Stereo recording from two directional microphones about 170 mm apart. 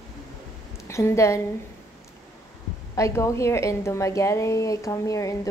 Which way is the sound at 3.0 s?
20° left (ahead or behind).